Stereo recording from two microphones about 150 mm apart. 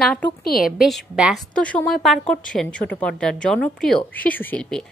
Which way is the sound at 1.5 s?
5° left (ahead or behind).